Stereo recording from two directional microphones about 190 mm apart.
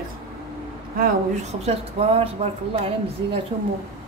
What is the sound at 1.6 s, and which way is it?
Speech, 35° right (ahead or behind).